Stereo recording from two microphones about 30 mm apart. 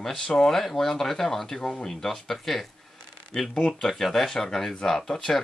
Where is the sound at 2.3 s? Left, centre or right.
Centre.